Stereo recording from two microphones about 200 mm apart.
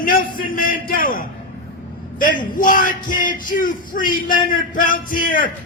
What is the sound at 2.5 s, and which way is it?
A man's voice, 40° left (ahead or behind).